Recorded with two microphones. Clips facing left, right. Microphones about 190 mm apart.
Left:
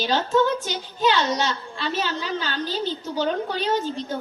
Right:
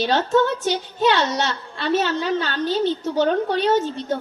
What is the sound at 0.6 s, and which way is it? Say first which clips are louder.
A woman's voice: right 4 dB; 60° right (ahead or behind).